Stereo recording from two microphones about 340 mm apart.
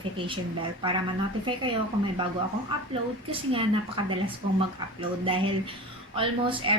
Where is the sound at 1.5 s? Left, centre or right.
Centre.